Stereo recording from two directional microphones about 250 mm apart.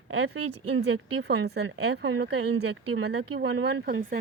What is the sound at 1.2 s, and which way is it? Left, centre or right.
Speech, right.